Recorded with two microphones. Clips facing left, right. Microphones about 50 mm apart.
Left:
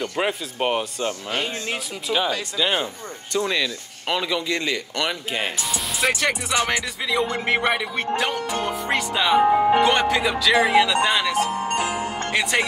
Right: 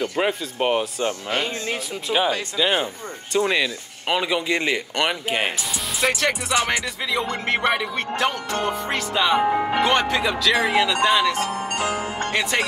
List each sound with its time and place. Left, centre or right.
0.0 s speech: centre
2.1 s speech: centre
2.5 s speech: centre; by 5.5 s right
5.9 s speech: centre
11.7 s music: centre
12.3 s speech: centre